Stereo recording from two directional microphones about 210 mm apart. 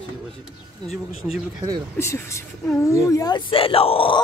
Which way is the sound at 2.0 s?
15° left (ahead or behind).